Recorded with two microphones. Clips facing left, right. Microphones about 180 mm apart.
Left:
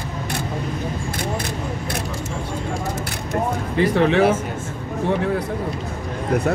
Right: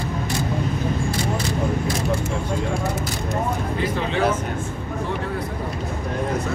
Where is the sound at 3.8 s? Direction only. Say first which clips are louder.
Left 8 dB; 70° left (ahead or behind).